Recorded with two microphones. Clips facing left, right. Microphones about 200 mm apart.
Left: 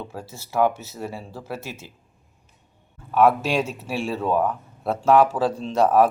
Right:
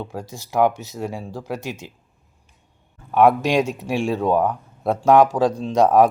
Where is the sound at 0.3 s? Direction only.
15° right (ahead or behind).